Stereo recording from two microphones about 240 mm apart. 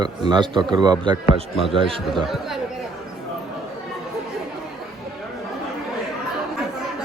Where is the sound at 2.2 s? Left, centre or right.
Centre.